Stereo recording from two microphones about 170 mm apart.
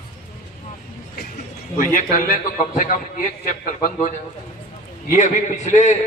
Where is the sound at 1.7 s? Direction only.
50° left (ahead or behind).